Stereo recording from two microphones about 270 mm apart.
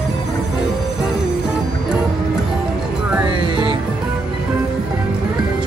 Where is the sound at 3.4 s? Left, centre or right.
Centre.